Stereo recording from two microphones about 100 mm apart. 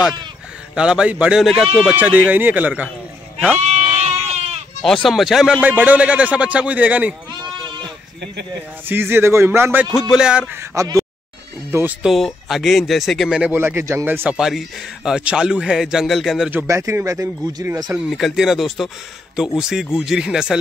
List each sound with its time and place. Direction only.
0.7 s a man's voice: 10° right (ahead or behind)
2.0 s a man's voice: 15° right (ahead or behind)
3.6 s goat: 90° right
4.8 s speech: centre (ahead or behind)
5.6 s a man's voice: 15° right (ahead or behind)
8.8 s speech: 20° right (ahead or behind)
9.9 s speech: 5° right (ahead or behind)
10.5 s speech: 25° right (ahead or behind)
11.7 s speech: 20° right (ahead or behind)
12.0 s speech: centre (ahead or behind)
13.4 s speech: 20° right (ahead or behind)
14.3 s speech: 5° right (ahead or behind)
16.6 s speech: 30° right (ahead or behind)
17.9 s a man's voice: centre (ahead or behind)